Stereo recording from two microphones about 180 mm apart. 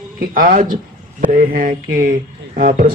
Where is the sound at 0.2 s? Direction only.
50° right (ahead or behind).